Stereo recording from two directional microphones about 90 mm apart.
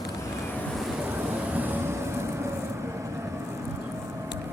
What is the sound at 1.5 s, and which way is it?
Vehicle, 20° right (ahead or behind).